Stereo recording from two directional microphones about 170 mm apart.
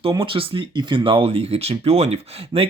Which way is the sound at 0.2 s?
30° right (ahead or behind).